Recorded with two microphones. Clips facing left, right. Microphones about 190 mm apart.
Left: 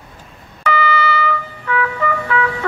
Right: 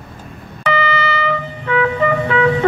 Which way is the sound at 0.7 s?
20° right (ahead or behind).